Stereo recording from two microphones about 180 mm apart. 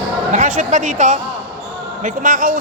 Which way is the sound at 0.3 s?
45° right (ahead or behind).